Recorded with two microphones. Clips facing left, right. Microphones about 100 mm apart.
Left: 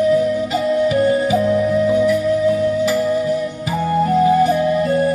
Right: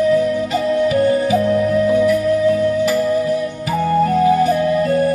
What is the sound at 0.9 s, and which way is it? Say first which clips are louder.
Music: even; 30° left (ahead or behind).